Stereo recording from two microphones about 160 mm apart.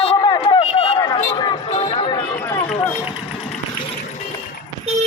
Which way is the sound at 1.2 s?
30° left (ahead or behind).